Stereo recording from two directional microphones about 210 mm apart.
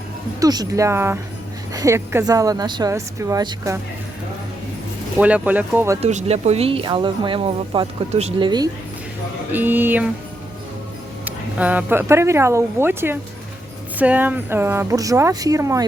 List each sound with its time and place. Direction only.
0.3 s a woman's voice: 20° right (ahead or behind)
5.1 s a woman's voice: 5° right (ahead or behind)
6.0 s speech: 30° right (ahead or behind)
9.5 s a woman's voice: 10° right (ahead or behind)
11.3 s a woman's voice: 5° right (ahead or behind)